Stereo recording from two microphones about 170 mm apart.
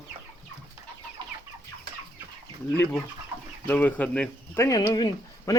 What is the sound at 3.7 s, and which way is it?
Speech, 10° left (ahead or behind).